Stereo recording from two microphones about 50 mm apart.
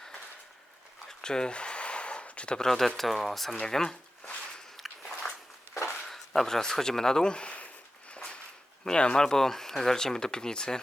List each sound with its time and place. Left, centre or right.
1.2 s a sound: centre
2.6 s speech: centre
3.6 s speech: centre
4.8 s walk: centre
5.7 s walk: left
6.1 s speech: centre; by 7.7 s left
8.1 s a sound: left
8.8 s speech: centre